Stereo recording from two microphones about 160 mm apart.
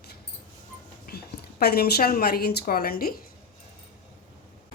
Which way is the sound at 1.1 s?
75° left (ahead or behind).